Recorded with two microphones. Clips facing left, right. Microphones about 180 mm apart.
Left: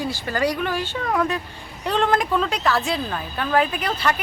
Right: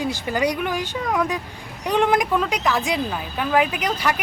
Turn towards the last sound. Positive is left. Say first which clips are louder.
# even
turn(degrees=-15)  # may be behind; listen again after turning